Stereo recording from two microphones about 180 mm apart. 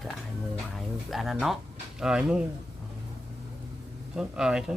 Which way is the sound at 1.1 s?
Centre (ahead or behind).